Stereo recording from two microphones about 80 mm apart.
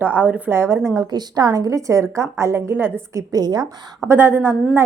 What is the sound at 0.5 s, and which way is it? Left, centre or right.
Speech, right.